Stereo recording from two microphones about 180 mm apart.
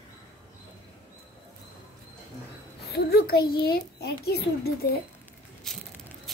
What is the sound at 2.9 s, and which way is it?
A child's voice, 60° left (ahead or behind).